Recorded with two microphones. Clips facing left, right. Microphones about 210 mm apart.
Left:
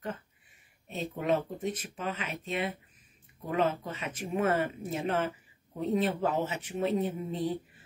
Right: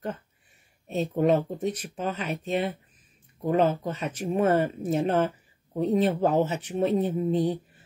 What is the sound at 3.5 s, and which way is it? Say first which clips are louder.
Speech: right 5 dB; 35° right (ahead or behind).